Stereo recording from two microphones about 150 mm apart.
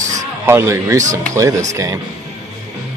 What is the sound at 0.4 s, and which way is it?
Speech, 15° right (ahead or behind).